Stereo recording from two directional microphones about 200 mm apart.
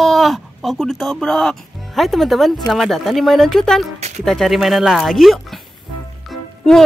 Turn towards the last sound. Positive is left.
turn(degrees=0)  # may be behind; listen again after turning